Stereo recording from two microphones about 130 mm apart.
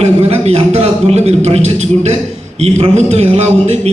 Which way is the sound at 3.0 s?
55° right (ahead or behind).